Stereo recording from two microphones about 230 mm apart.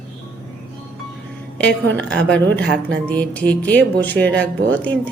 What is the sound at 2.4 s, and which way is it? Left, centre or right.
Speech, right.